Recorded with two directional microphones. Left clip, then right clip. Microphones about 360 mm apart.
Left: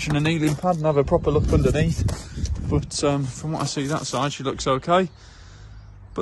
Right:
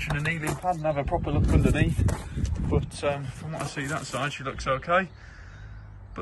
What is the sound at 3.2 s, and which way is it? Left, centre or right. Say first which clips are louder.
Speech: left 7 dB; centre.